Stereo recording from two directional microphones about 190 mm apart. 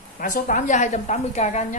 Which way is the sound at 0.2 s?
45° left (ahead or behind).